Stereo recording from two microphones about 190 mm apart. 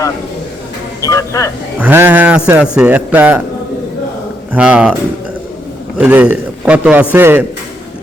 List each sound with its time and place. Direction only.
1.0 s speech: 15° left (ahead or behind)
1.8 s a man's voice: 10° right (ahead or behind)
4.5 s speech: 5° right (ahead or behind)
6.0 s a man's voice: 10° right (ahead or behind)